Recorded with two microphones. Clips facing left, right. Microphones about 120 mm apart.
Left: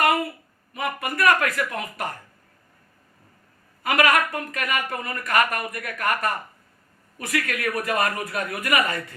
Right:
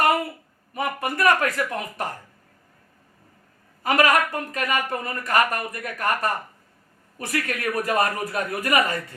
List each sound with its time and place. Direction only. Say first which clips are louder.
0.7 s speech: right 2 dB; 30° right (ahead or behind)
3.8 s speech: right 1 dB; 30° right (ahead or behind)